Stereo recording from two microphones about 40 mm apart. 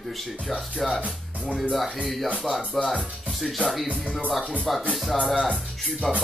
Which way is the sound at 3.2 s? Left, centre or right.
Centre.